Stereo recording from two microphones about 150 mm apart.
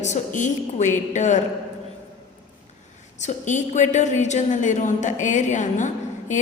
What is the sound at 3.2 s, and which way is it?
A woman's voice, 55° left (ahead or behind).